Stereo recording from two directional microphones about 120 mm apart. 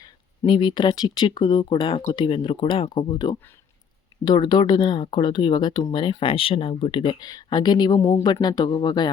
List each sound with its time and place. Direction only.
0.0 s speech: 40° left (ahead or behind)